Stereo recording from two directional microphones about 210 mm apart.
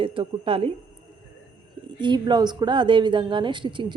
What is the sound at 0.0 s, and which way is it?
Speech, 25° right (ahead or behind).